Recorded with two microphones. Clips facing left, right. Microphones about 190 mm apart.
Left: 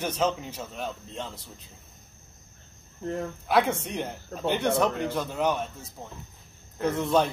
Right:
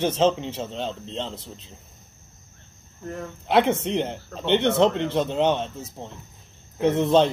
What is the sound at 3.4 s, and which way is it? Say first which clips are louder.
Speech: right 5 dB; 25° right (ahead or behind).